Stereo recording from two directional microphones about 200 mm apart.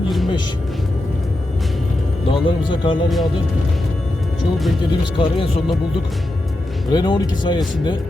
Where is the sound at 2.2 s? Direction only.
25° left (ahead or behind).